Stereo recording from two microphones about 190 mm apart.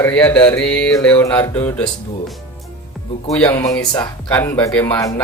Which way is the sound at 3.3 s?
10° left (ahead or behind).